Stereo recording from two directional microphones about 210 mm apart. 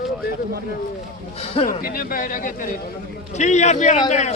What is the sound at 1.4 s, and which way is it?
Speech, 30° left (ahead or behind).